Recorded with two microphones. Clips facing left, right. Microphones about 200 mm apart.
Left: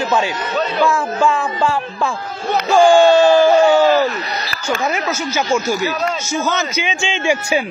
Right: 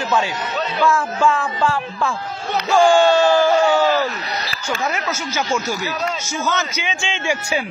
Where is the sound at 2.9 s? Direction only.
15° left (ahead or behind).